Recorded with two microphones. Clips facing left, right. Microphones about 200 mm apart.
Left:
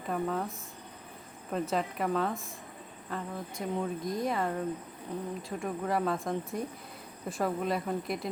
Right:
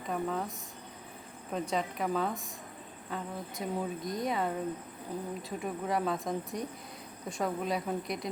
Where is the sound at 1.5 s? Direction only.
Centre (ahead or behind).